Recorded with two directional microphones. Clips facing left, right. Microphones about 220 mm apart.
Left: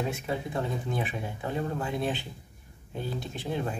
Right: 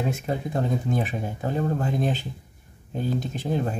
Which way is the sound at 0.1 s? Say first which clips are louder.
Right 4 dB; 40° right (ahead or behind).